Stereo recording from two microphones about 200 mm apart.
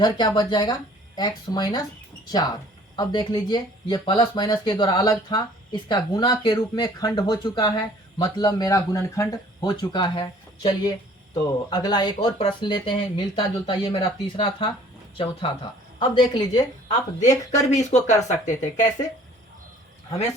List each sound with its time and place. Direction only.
0.0 s speech: 20° left (ahead or behind)
2.9 s speech: 25° left (ahead or behind)
16.9 s speech: 35° left (ahead or behind)